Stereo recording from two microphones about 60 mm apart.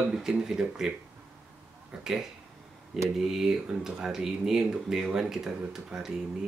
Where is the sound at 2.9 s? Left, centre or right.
Centre.